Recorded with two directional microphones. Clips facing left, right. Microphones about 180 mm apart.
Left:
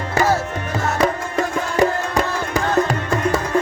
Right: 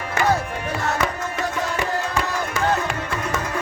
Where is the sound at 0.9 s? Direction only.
35° left (ahead or behind).